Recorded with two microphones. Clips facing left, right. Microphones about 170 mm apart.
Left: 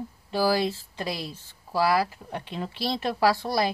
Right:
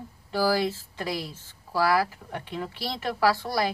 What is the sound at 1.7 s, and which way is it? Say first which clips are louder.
Speech: even; 25° left (ahead or behind).